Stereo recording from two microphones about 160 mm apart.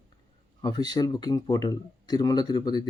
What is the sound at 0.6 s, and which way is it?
Speech, 25° left (ahead or behind).